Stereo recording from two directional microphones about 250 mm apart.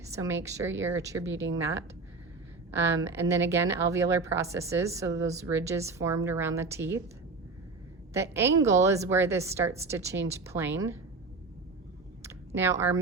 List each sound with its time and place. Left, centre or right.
0.1 s a woman's voice: centre
1.3 s speech: right
2.7 s a woman's voice: centre
8.1 s a woman's voice: centre
12.5 s a woman's voice: centre